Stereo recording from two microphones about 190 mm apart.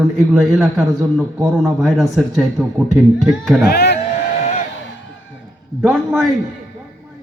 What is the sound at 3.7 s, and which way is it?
Speech, 60° left (ahead or behind).